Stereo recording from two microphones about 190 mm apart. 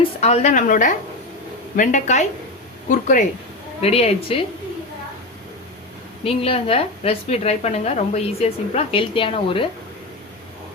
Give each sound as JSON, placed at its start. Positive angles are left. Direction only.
{"t": 0.2, "sound": "a woman's voice", "side_deg": 35}
{"t": 3.8, "sound": "a woman's voice", "side_deg": 30}
{"t": 6.2, "sound": "a woman's voice", "side_deg": 30}